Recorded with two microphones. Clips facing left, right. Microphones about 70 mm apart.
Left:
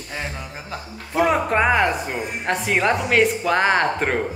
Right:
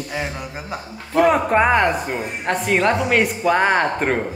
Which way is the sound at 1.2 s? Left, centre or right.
Centre.